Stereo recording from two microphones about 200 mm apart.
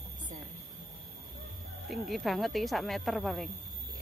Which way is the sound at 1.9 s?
Centre (ahead or behind).